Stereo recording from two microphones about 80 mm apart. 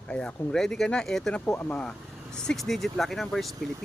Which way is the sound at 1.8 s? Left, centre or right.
Centre.